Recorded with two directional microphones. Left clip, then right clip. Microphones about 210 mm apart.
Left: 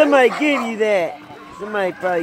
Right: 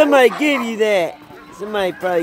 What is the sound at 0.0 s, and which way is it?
Speech, 20° right (ahead or behind).